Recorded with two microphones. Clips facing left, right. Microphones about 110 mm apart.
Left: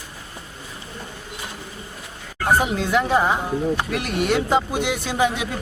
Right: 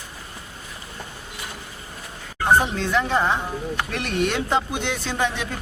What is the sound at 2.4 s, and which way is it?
Speech, 5° left (ahead or behind).